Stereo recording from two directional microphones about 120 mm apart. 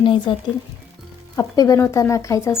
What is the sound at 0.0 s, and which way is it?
Speech, 45° left (ahead or behind).